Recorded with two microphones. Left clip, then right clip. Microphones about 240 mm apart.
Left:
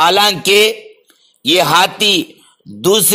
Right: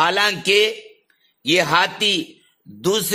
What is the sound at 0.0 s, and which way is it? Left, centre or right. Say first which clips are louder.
A man's voice: left 7 dB; centre.